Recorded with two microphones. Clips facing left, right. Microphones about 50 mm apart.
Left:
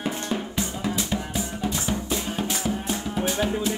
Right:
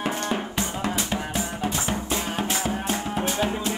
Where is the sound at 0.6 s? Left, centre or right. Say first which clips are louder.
Right 1 dB; right.